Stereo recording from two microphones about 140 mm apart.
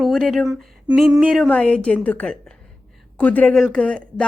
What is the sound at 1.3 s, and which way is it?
Speech, 5° left (ahead or behind).